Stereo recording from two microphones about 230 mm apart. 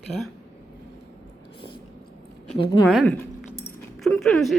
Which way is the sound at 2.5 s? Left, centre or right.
Left.